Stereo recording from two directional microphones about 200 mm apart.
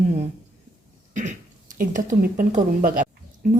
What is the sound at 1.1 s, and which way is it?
A woman's voice, 40° right (ahead or behind).